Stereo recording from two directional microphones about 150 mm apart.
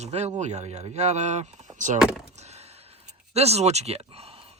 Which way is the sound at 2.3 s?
45° right (ahead or behind).